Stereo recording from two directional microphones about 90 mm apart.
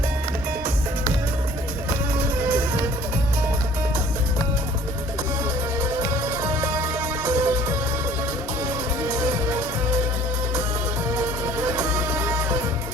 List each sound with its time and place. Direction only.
2.1 s music: 20° right (ahead or behind)
5.8 s music: 40° right (ahead or behind)
11.1 s music: 25° right (ahead or behind)